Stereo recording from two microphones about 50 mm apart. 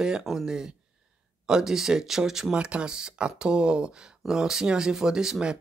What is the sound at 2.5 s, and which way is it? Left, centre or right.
Speech, centre.